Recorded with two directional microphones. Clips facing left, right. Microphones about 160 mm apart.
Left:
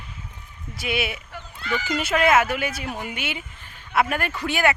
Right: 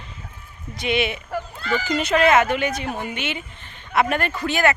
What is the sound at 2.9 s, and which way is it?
Speech, 35° right (ahead or behind).